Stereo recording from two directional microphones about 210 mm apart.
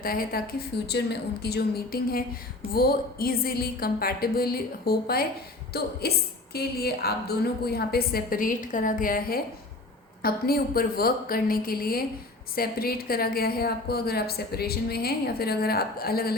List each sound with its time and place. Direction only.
0.0 s a woman's voice: 45° left (ahead or behind)